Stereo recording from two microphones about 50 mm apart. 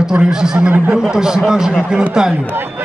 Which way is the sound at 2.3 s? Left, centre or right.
Right.